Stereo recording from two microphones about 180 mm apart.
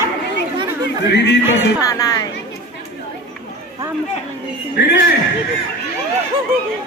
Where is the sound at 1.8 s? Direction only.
20° left (ahead or behind).